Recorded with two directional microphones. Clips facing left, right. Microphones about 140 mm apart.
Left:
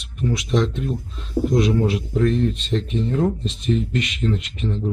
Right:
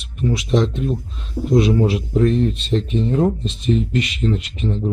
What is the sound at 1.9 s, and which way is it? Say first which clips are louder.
Speech: right 3 dB; 20° right (ahead or behind).